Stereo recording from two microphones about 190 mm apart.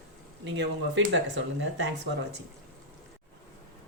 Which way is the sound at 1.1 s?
75° right (ahead or behind).